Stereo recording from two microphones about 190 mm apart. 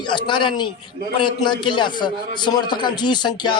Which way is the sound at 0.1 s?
25° left (ahead or behind).